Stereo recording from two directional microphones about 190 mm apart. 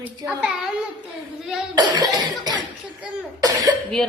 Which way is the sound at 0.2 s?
15° right (ahead or behind).